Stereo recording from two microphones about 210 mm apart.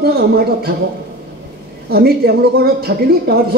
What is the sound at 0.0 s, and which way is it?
Speech, 50° right (ahead or behind).